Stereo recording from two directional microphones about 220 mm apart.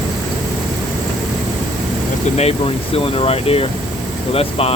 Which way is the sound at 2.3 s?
30° left (ahead or behind).